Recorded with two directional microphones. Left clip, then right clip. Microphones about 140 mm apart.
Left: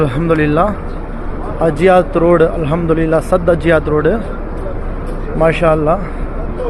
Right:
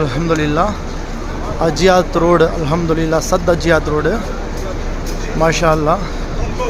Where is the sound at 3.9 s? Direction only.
5° right (ahead or behind).